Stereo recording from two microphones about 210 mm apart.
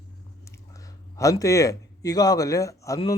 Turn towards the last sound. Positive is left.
turn(degrees=15)  # may be behind; listen again after turning